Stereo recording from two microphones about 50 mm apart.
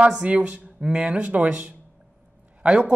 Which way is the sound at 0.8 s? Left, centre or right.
Centre.